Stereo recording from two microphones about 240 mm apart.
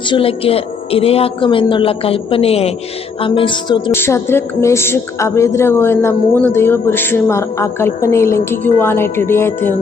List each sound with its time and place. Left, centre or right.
0.1 s speech: left